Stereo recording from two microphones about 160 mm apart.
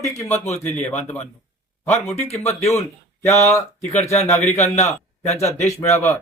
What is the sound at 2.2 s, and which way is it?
Speech, 40° left (ahead or behind).